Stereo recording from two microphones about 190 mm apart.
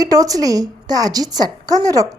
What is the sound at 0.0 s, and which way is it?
A woman's voice, 20° right (ahead or behind).